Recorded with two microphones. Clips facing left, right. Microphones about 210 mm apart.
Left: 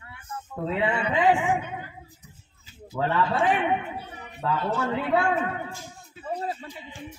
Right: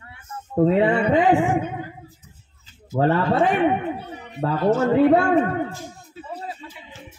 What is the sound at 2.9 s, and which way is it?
Speech, 45° right (ahead or behind).